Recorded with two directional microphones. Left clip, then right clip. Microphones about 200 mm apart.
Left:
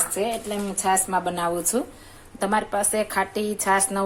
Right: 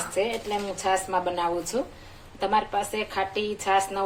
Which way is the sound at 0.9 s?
45° left (ahead or behind).